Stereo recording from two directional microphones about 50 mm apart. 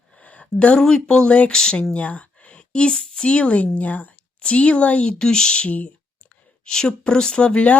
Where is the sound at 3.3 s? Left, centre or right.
Left.